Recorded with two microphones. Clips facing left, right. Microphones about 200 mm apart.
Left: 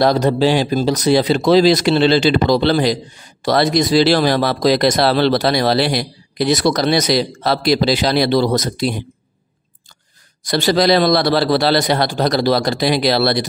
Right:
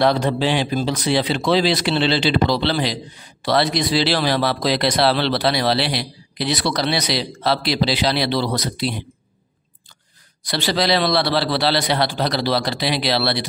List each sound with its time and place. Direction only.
0.0 s speech: 40° left (ahead or behind)
10.4 s speech: 45° left (ahead or behind)